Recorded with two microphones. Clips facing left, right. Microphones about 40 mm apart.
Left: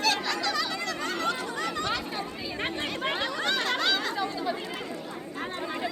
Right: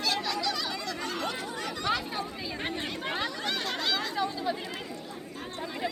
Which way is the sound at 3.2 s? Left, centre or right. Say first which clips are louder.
Left 3 dB; left.